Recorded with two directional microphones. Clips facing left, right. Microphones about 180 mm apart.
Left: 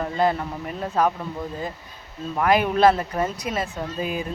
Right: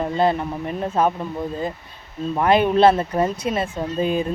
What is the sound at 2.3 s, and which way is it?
Speech, 25° right (ahead or behind).